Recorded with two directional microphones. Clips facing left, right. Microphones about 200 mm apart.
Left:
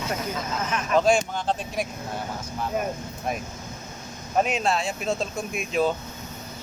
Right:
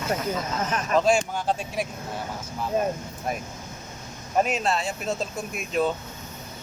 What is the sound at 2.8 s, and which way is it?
Speech, 25° right (ahead or behind).